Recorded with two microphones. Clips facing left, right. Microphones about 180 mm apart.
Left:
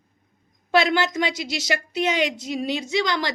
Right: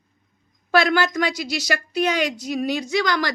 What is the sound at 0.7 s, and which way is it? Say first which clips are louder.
A woman's voice: right 1 dB; 25° left (ahead or behind).